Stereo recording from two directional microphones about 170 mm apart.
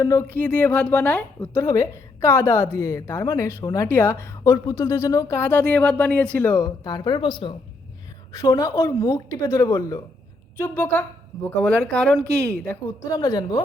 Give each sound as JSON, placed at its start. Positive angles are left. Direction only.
{"t": 0.0, "sound": "a woman's voice", "side_deg": 15}
{"t": 1.6, "sound": "a woman's voice", "side_deg": 20}
{"t": 13.1, "sound": "a woman's voice", "side_deg": 25}